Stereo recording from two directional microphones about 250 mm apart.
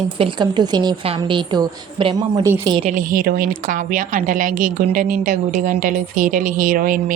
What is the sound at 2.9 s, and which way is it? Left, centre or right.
A woman's voice, right.